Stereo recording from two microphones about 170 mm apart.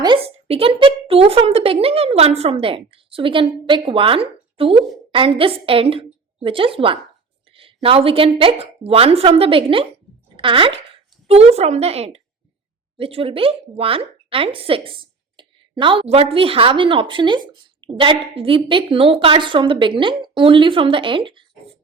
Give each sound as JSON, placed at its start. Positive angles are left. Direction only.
{"t": 0.0, "sound": "a woman's voice", "side_deg": -30}
{"t": 7.5, "sound": "a sound", "side_deg": -35}
{"t": 8.4, "sound": "a woman's voice", "side_deg": -35}